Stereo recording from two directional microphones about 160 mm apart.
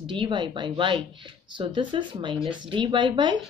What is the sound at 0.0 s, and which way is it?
Speech, 30° right (ahead or behind).